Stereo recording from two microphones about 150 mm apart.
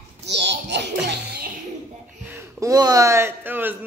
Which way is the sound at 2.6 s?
25° right (ahead or behind).